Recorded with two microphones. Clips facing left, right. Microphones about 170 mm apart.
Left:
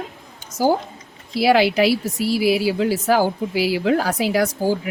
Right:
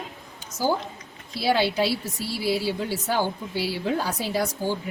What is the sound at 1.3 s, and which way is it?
A woman's voice, 90° left.